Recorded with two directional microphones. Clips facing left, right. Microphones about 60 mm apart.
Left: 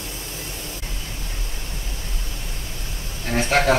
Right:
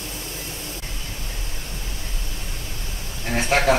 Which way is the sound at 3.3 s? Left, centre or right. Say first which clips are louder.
Even; right.